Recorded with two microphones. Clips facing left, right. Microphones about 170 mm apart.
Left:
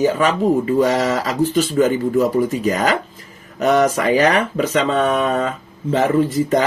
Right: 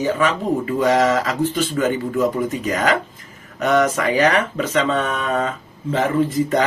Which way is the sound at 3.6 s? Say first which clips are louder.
Left 2 dB; 35° left (ahead or behind).